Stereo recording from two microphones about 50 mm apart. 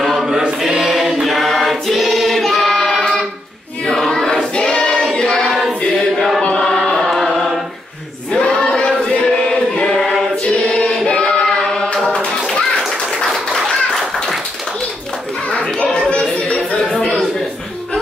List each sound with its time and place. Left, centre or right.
0.0 s chant: centre
0.3 s chant: centre
0.7 s choir: centre
7.0 s chant: centre
8.3 s choir: left
8.5 s music: centre
9.9 s choir: centre
10.4 s choir: centre
15.4 s a sound: left